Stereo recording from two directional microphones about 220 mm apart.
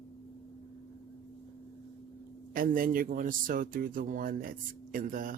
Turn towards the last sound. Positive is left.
turn(degrees=-40)  # may be behind; listen again after turning